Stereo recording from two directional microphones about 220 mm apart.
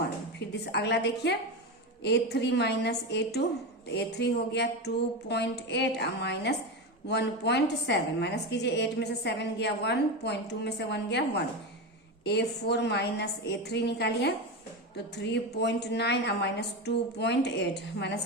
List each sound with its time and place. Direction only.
0.0 s a woman's voice: 50° left (ahead or behind)